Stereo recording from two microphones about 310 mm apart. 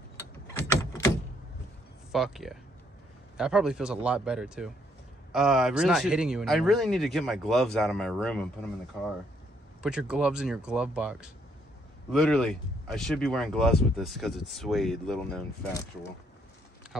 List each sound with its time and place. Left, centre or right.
0.5 s a sound: centre
2.1 s speech: centre
9.8 s speech: centre